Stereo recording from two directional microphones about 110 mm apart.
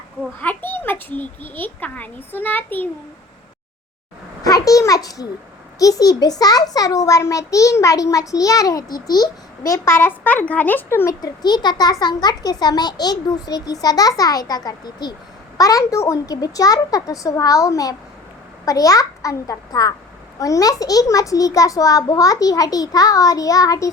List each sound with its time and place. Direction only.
0.3 s a child's voice: 15° left (ahead or behind)
4.4 s a sound: 30° left (ahead or behind)
5.8 s a child's voice: 35° left (ahead or behind)
11.2 s a child's voice: 40° left (ahead or behind)